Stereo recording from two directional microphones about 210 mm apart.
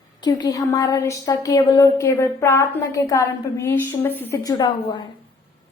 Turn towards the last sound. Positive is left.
turn(degrees=20)  # may be behind; listen again after turning